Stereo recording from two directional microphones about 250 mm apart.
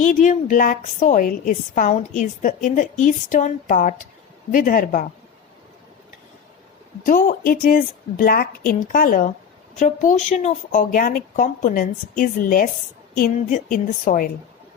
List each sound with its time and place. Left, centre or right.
0.0 s a woman's voice: left
7.0 s a woman's voice: left